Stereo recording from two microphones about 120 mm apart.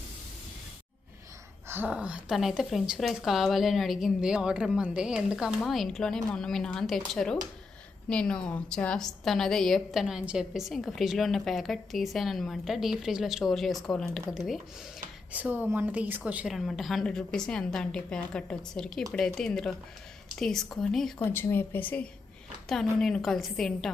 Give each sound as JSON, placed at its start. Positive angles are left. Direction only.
{"t": 1.6, "sound": "a woman's voice", "side_deg": -15}
{"t": 15.3, "sound": "a woman's voice", "side_deg": -15}
{"t": 16.5, "sound": "a woman's voice", "side_deg": 0}
{"t": 21.2, "sound": "a woman's voice", "side_deg": 20}
{"t": 22.7, "sound": "a woman's voice", "side_deg": 5}